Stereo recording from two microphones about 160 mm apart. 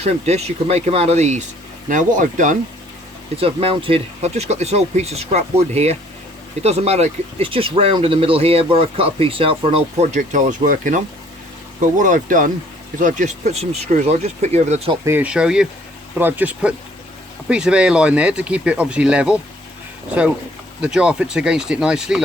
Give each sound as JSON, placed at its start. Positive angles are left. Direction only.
{"t": 0.0, "sound": "speech", "side_deg": -40}
{"t": 3.4, "sound": "speech", "side_deg": -35}
{"t": 15.0, "sound": "speech", "side_deg": -10}
{"t": 20.8, "sound": "speech", "side_deg": -5}